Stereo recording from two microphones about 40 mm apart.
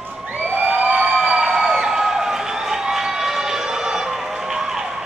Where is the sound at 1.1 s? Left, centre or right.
Right.